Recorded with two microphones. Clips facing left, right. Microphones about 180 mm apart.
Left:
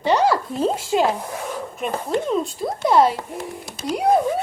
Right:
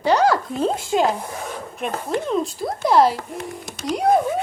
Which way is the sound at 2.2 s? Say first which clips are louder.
Even; centre (ahead or behind).